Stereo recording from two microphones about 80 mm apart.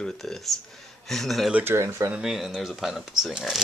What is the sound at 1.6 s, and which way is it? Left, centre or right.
Speech, right.